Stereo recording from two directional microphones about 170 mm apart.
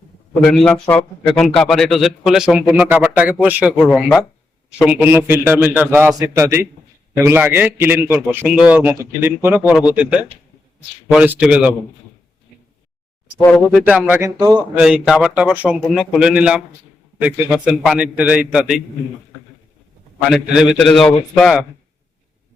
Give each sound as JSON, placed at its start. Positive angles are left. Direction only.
{"t": 0.5, "sound": "a man's voice", "side_deg": 5}
{"t": 11.1, "sound": "a man's voice", "side_deg": -5}
{"t": 13.7, "sound": "a man's voice", "side_deg": -5}
{"t": 14.8, "sound": "a man's voice", "side_deg": -5}
{"t": 20.3, "sound": "a man's voice", "side_deg": -5}